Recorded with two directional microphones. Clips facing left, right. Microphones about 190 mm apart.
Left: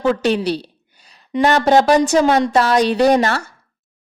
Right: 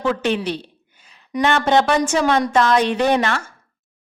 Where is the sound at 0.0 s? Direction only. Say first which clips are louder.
Left 4 dB; 35° left (ahead or behind).